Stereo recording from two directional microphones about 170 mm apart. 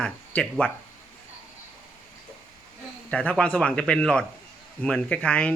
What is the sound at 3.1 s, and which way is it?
Speech, 5° left (ahead or behind).